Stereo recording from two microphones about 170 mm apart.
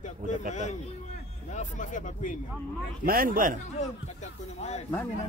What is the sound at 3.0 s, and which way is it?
Speech, 60° right (ahead or behind).